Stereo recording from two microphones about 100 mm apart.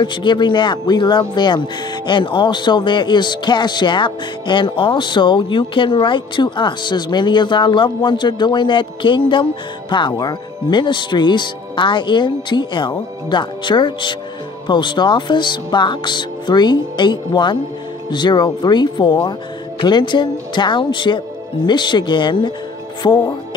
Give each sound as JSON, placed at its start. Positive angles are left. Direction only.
{"t": 0.0, "sound": "speech", "side_deg": 50}